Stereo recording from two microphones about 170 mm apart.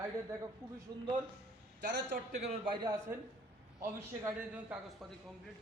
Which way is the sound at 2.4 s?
30° right (ahead or behind).